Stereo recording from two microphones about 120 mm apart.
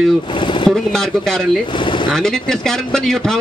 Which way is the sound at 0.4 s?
40° left (ahead or behind).